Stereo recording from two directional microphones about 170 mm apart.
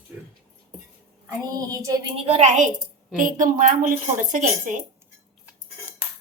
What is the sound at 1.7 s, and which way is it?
A woman's voice, 20° right (ahead or behind).